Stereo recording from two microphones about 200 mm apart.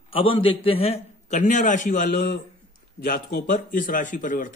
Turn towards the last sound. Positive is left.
turn(degrees=40)  # may be behind; listen again after turning